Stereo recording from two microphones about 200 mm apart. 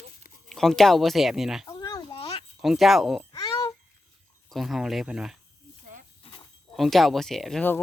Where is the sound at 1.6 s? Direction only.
15° left (ahead or behind).